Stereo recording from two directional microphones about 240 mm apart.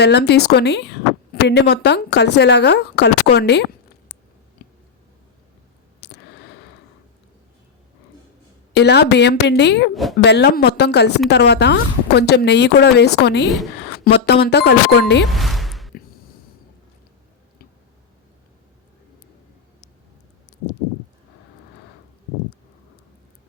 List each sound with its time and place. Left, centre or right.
0.0 s a woman's voice: left
8.7 s a woman's voice: left
9.9 s a woman's voice: centre
10.2 s a woman's voice: left
15.3 s music: centre